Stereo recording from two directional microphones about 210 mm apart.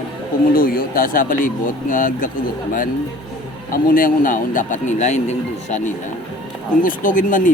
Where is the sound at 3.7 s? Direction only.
40° left (ahead or behind).